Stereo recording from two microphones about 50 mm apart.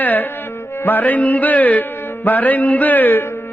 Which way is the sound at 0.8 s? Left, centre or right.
Left.